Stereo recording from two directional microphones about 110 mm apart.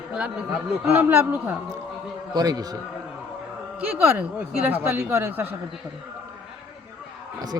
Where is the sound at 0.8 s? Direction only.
20° right (ahead or behind).